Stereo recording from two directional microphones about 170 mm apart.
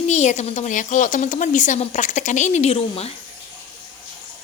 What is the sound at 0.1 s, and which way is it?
Speech, 45° left (ahead or behind).